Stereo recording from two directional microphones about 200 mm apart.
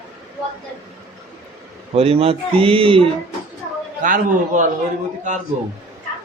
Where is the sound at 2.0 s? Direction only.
30° right (ahead or behind).